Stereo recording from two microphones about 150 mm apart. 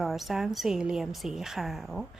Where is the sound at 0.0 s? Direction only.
Centre (ahead or behind).